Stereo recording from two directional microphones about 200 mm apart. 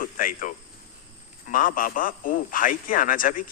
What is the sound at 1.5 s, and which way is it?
A man's voice, 45° left (ahead or behind).